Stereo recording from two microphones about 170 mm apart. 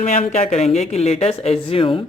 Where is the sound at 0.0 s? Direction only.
45° left (ahead or behind).